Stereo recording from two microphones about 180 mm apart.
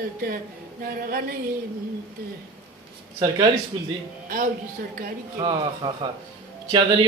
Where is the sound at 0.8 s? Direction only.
55° right (ahead or behind).